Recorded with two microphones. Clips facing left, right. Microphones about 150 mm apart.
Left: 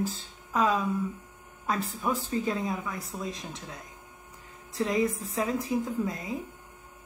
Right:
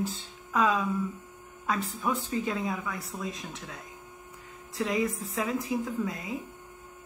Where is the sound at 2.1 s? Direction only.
35° left (ahead or behind).